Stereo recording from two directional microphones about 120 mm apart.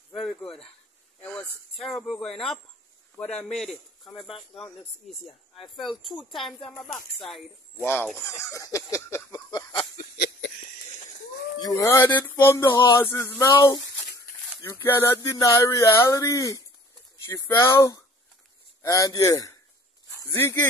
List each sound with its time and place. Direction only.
0.1 s a sound: centre (ahead or behind)
1.8 s speech: centre (ahead or behind)
3.2 s a man's voice: 65° left (ahead or behind)
3.4 s speech: 5° left (ahead or behind)
7.8 s a sound: 15° left (ahead or behind)
8.4 s speech: 25° left (ahead or behind)
11.6 s speech: 25° left (ahead or behind)
12.2 s a sound: 15° left (ahead or behind)
12.7 s speech: 35° left (ahead or behind)
13.0 s speech: 20° left (ahead or behind)
13.6 s a sound: 25° left (ahead or behind)
14.7 s speech: 20° left (ahead or behind)
15.2 s speech: 30° left (ahead or behind)